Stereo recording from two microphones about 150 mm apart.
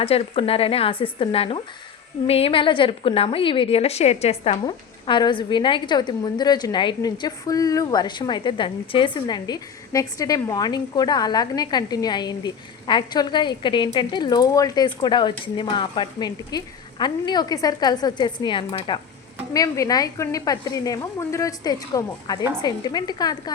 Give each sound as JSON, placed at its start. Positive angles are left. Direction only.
{"t": 0.0, "sound": "a woman's voice", "side_deg": 40}
{"t": 4.6, "sound": "a woman's voice", "side_deg": 30}
{"t": 19.5, "sound": "a woman's voice", "side_deg": 20}